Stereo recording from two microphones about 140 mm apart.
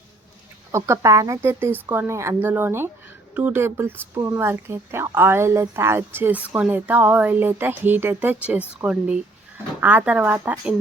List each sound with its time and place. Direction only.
0.7 s a woman's voice: 20° right (ahead or behind)